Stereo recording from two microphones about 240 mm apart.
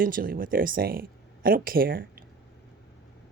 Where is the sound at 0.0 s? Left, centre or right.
Right.